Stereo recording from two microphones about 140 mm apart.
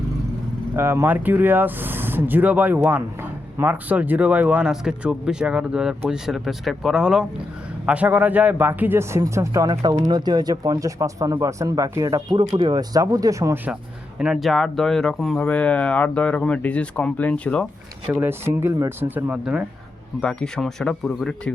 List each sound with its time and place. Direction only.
0.8 s speech: 15° right (ahead or behind)
14.2 s speech: 5° right (ahead or behind)
18.1 s speech: 15° right (ahead or behind)
20.2 s speech: 5° left (ahead or behind)